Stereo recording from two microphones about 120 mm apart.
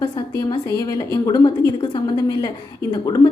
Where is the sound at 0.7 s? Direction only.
30° left (ahead or behind).